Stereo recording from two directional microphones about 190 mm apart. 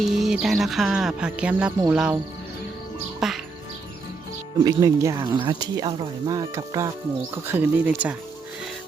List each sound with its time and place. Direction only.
0.0 s speech: centre (ahead or behind)
3.2 s speech: centre (ahead or behind)
4.6 s speech: 15° right (ahead or behind)